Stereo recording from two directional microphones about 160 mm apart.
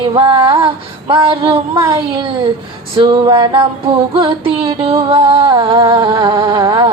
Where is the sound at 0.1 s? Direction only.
35° right (ahead or behind).